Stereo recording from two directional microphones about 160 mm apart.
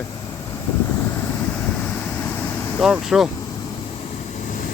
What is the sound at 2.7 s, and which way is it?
Speech, 5° right (ahead or behind).